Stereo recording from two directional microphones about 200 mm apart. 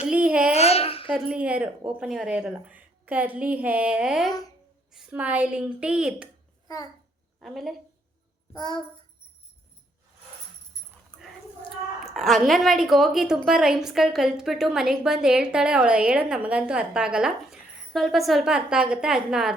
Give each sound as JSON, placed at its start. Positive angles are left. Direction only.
{"t": 0.0, "sound": "a sound", "side_deg": -5}
{"t": 0.5, "sound": "babbling", "side_deg": 30}
{"t": 1.0, "sound": "a woman's voice", "side_deg": -5}
{"t": 7.4, "sound": "a woman's voice", "side_deg": 0}
{"t": 8.5, "sound": "a child's voice", "side_deg": 20}
{"t": 11.1, "sound": "dog", "side_deg": 20}
{"t": 12.1, "sound": "a woman's voice", "side_deg": 0}